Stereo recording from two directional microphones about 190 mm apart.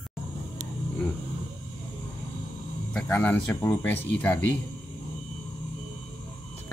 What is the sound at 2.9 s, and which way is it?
Speech, 5° left (ahead or behind).